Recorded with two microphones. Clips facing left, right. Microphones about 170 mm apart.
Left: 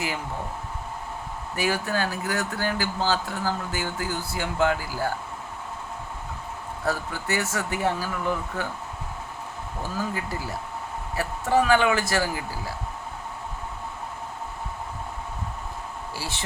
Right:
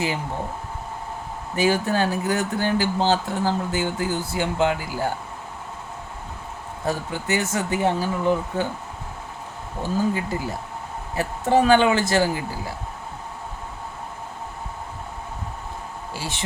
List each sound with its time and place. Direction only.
1.5 s speech: 25° right (ahead or behind)
6.8 s speech: 20° right (ahead or behind)
10.0 s speech: 20° right (ahead or behind)
16.1 s speech: 20° right (ahead or behind)